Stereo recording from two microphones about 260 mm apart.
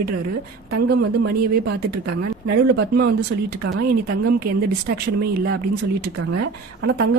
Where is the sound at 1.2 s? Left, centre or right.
Right.